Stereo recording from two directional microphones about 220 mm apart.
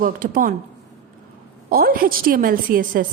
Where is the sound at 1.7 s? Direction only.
40° right (ahead or behind).